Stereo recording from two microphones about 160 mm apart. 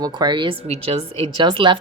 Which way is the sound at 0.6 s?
40° right (ahead or behind).